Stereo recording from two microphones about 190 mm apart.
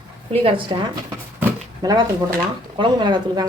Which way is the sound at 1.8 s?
20° right (ahead or behind).